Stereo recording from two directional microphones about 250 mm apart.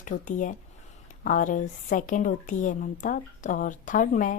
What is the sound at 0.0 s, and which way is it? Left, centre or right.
Speech, left.